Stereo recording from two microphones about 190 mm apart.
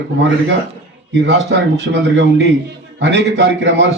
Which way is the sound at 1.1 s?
70° right (ahead or behind).